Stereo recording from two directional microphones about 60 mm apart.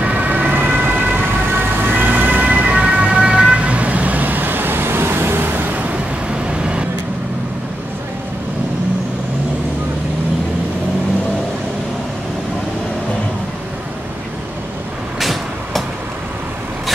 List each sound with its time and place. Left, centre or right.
0.0 s emergency vehicle: right
6.3 s vehicle: centre
15.1 s vehicle: centre